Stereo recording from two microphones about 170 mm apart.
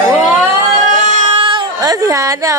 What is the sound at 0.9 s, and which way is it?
Baby cry, 45° right (ahead or behind).